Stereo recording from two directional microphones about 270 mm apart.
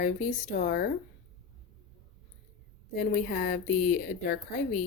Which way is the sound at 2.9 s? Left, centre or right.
Left.